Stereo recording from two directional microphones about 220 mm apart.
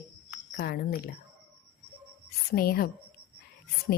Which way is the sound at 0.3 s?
50° left (ahead or behind).